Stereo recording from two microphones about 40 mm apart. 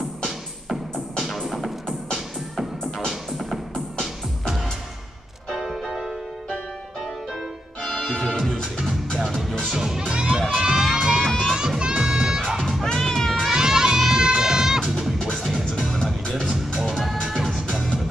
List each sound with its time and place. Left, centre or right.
1.2 s music: centre
3.1 s music: centre
5.5 s music: centre
7.8 s music: centre
9.7 s music: centre
10.6 s run: centre
10.9 s music: centre
11.2 s music: centre
11.8 s music: centre
12.8 s cat: centre
13.5 s music: centre
16.3 s music: centre
16.8 s music: centre